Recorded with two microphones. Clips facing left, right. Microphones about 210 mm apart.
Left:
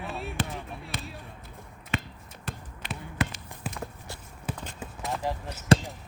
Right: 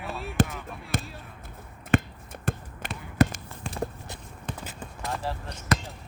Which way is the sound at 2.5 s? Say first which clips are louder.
Right 8 dB; 50° right (ahead or behind).